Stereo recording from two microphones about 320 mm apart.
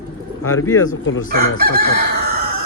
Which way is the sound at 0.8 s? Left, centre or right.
Left.